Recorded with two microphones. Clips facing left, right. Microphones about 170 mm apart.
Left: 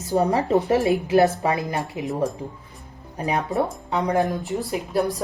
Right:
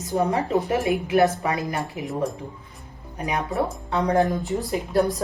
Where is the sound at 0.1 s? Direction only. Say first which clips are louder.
Left 3 dB; 35° left (ahead or behind).